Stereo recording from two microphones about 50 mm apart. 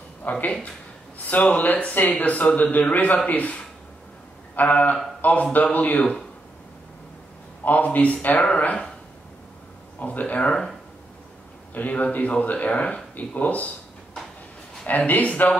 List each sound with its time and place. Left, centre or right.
0.2 s speech: left
1.1 s a sound: left
1.8 s speech: left
7.6 s speech: left
9.9 s speech: left
11.7 s speech: left
14.9 s speech: left